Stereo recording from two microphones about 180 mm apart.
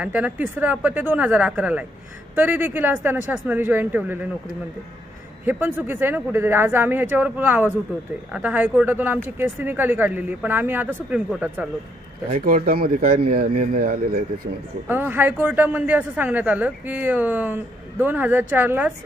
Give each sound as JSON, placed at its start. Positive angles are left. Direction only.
{"t": 0.0, "sound": "speech", "side_deg": -10}
{"t": 5.5, "sound": "speech", "side_deg": -10}
{"t": 12.3, "sound": "speech", "side_deg": -50}
{"t": 14.8, "sound": "speech", "side_deg": -10}